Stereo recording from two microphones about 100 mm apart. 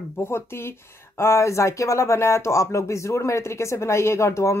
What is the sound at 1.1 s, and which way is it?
Speech, 30° left (ahead or behind).